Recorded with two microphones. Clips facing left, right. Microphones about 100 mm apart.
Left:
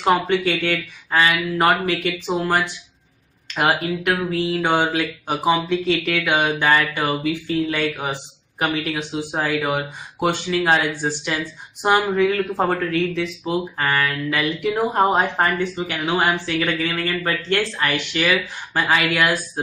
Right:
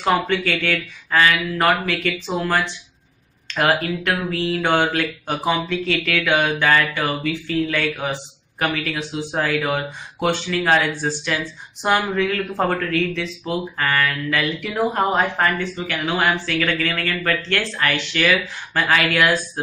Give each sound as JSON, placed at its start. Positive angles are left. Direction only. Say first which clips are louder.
{"t": 0.0, "sound": "speech", "louder": "left 1 dB", "side_deg": 20}